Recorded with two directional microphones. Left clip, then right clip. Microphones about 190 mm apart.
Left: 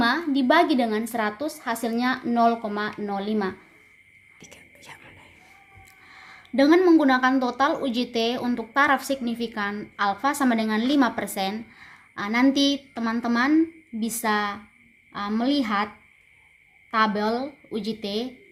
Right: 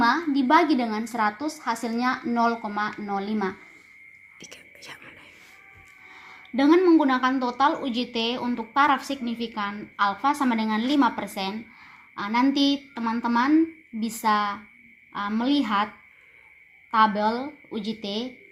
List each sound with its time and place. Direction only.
0.4 s a woman's voice: 35° left (ahead or behind)
4.4 s whispering: 5° right (ahead or behind)
6.7 s a woman's voice: 40° left (ahead or behind)
16.9 s speech: 30° left (ahead or behind)